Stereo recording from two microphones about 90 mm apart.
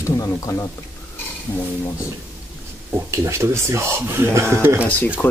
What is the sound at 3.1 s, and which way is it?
Speech, 30° right (ahead or behind).